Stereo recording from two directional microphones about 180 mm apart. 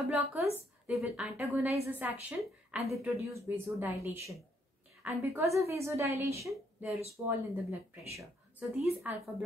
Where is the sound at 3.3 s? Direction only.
15° right (ahead or behind).